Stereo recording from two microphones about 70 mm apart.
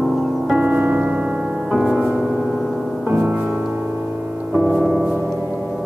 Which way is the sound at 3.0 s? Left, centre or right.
Right.